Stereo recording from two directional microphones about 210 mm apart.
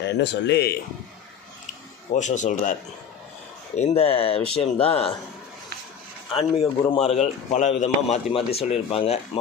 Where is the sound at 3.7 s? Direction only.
30° left (ahead or behind).